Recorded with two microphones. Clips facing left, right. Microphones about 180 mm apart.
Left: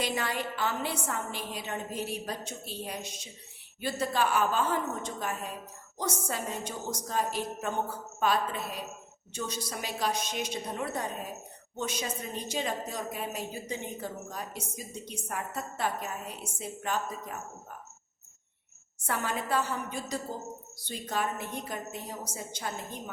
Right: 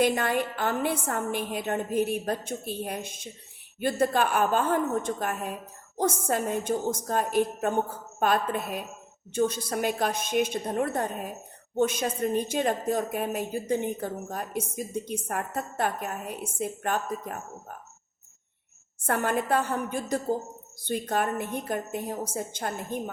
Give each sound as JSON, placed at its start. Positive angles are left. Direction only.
{"t": 0.0, "sound": "a woman's voice", "side_deg": -55}
{"t": 19.0, "sound": "a woman's voice", "side_deg": -55}